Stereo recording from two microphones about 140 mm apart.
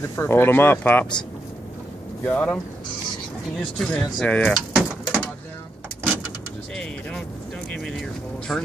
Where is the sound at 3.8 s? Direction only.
10° left (ahead or behind).